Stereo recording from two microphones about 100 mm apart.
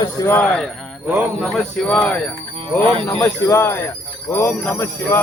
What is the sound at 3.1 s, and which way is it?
Jingle bell, 25° left (ahead or behind).